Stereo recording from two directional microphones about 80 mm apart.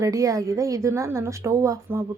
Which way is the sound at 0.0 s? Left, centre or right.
Right.